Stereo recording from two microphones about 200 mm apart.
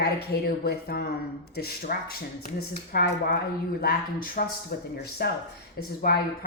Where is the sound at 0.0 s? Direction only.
50° left (ahead or behind).